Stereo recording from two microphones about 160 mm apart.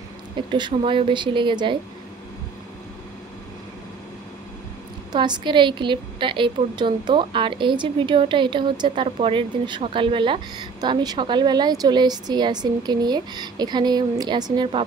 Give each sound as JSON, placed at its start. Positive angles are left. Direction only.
{"t": 0.5, "sound": "a woman's voice", "side_deg": -30}
{"t": 5.1, "sound": "a woman's voice", "side_deg": -25}